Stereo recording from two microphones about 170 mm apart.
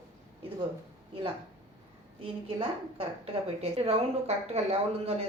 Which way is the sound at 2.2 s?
35° right (ahead or behind).